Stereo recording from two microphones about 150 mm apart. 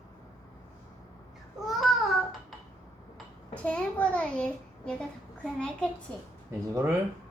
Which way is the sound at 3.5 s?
10° left (ahead or behind).